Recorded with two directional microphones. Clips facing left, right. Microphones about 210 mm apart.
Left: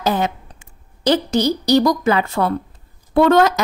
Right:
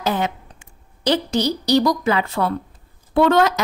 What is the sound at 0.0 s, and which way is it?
A woman's voice, 40° left (ahead or behind).